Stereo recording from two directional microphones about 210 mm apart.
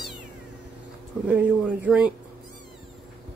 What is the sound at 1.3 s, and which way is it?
Speech, 5° right (ahead or behind).